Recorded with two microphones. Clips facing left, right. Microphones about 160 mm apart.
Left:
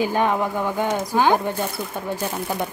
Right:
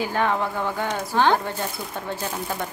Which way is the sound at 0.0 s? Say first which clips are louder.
Left 3 dB; 15° left (ahead or behind).